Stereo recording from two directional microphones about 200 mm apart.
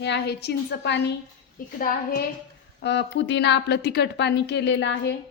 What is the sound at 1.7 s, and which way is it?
Speech, 45° left (ahead or behind).